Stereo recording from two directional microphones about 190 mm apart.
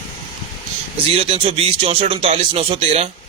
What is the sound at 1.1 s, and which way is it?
A man's voice, 30° right (ahead or behind).